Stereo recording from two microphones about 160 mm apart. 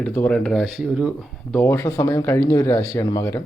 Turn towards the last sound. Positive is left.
turn(degrees=15)  # may be behind; listen again after turning